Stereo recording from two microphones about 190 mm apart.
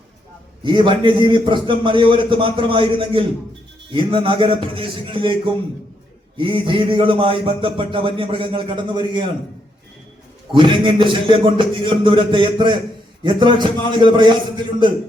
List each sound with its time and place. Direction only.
0.6 s a man's voice: 25° right (ahead or behind)
10.5 s a man's voice: 25° right (ahead or behind)